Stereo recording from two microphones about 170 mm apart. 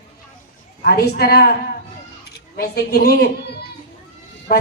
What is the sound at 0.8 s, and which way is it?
Speech, 65° left (ahead or behind).